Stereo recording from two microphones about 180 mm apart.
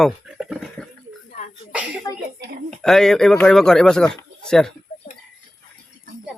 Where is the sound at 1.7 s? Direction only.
5° right (ahead or behind).